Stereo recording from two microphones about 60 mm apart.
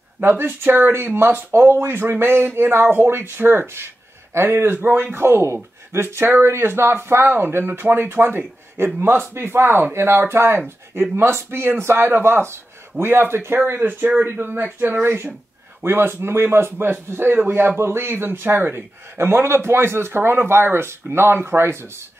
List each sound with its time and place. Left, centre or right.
0.2 s a man's voice: right